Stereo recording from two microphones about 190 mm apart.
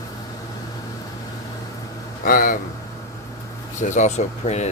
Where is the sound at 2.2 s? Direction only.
45° left (ahead or behind).